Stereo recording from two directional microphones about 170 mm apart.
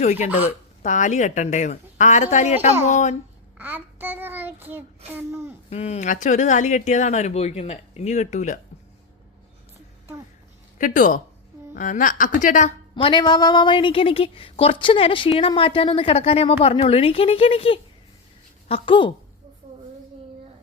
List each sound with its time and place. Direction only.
0.0 s speech: 45° left (ahead or behind)
3.6 s child singing: 10° right (ahead or behind)
5.7 s speech: 40° left (ahead or behind)
10.8 s speech: 50° left (ahead or behind)
13.0 s a woman's voice: 30° left (ahead or behind)